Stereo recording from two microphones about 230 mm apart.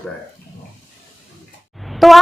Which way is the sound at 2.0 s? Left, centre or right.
Centre.